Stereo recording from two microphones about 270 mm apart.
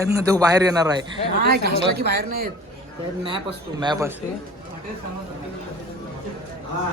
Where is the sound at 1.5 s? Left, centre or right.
Right.